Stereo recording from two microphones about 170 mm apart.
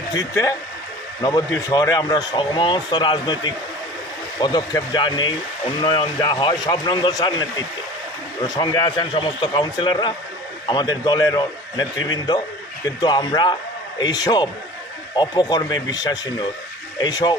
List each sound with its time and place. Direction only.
0.1 s speech: 20° left (ahead or behind)
8.4 s speech: 25° left (ahead or behind)